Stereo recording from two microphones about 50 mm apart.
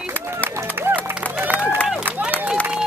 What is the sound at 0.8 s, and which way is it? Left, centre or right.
Music, right.